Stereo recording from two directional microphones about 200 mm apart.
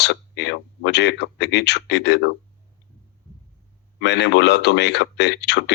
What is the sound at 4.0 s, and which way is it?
Speech, 60° left (ahead or behind).